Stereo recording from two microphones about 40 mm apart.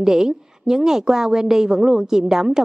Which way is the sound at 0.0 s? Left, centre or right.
Centre.